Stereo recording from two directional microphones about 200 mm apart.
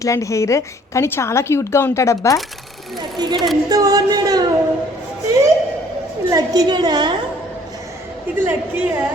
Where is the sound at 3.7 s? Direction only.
20° right (ahead or behind).